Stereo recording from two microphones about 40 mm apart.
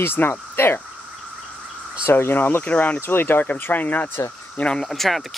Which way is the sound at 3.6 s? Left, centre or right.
Left.